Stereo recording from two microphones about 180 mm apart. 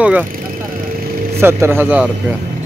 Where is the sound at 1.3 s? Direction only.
15° right (ahead or behind).